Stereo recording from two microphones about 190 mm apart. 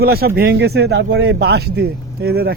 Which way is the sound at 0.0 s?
55° right (ahead or behind).